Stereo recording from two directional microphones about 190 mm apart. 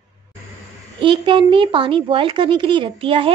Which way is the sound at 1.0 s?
25° right (ahead or behind).